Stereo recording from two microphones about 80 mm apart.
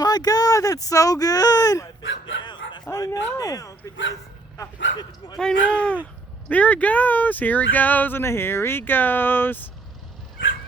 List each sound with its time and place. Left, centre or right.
0.0 s speech: left
2.4 s a sound: left
2.9 s speech: left
5.4 s speech: centre